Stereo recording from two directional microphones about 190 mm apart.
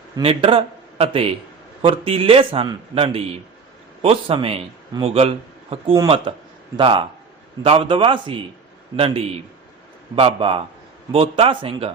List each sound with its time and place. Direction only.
0.2 s a man's voice: 30° right (ahead or behind)